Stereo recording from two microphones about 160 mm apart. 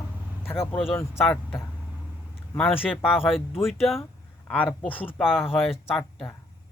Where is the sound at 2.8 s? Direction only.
10° left (ahead or behind).